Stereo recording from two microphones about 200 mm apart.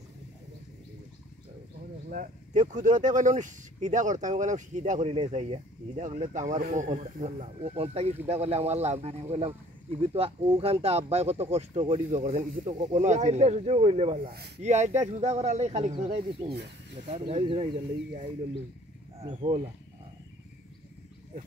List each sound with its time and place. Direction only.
2.0 s speech: 40° right (ahead or behind)
17.1 s speech: 35° right (ahead or behind)